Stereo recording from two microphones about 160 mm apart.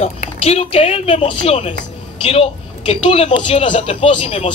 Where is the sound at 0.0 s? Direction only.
40° left (ahead or behind).